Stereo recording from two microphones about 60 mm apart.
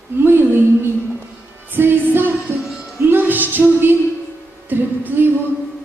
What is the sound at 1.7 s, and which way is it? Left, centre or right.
Speech, right.